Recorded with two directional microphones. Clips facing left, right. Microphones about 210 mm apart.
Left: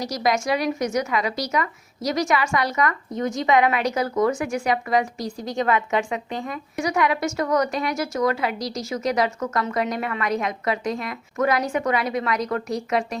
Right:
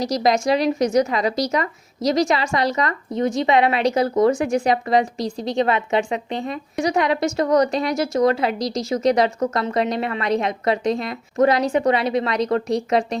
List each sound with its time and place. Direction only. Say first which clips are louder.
0.1 s a woman's voice: right 3 dB; 35° right (ahead or behind)